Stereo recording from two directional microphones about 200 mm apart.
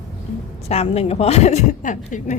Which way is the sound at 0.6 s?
30° left (ahead or behind).